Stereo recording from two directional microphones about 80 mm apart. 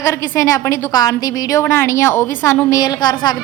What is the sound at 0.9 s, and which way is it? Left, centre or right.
A woman's voice, left.